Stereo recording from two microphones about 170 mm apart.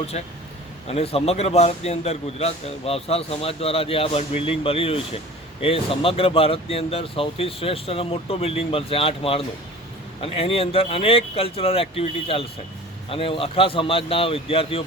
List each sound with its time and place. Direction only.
0.1 s a man's voice: 40° left (ahead or behind)